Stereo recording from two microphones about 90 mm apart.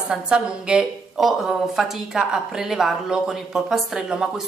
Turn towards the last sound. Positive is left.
turn(degrees=-10)  # may be behind; listen again after turning